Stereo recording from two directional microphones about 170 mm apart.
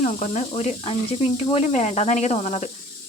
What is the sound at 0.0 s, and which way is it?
Speech, 45° left (ahead or behind).